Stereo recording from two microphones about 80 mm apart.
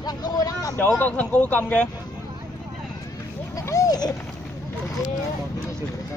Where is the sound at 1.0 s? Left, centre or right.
Centre.